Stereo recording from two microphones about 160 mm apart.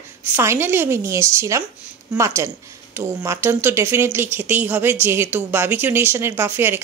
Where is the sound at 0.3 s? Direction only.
15° right (ahead or behind).